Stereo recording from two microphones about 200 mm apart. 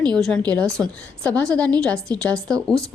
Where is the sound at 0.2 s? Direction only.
5° left (ahead or behind).